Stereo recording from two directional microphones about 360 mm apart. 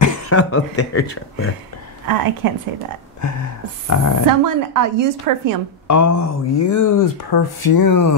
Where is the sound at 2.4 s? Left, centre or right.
Right.